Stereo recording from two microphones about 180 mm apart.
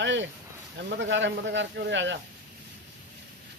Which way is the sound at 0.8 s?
80° right.